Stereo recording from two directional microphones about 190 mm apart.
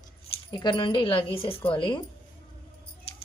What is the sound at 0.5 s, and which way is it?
Speech, 25° left (ahead or behind).